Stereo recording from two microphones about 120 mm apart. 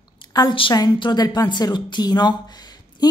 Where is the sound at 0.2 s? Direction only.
35° left (ahead or behind).